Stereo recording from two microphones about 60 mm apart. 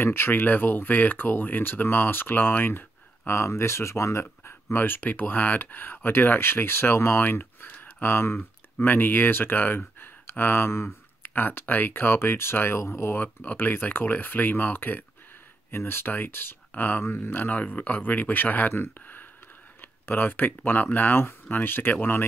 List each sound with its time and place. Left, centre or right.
0.0 s speech: left
11.3 s speech: left
13.2 s speech: left